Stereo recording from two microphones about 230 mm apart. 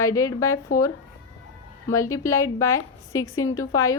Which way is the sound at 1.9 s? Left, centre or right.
Centre.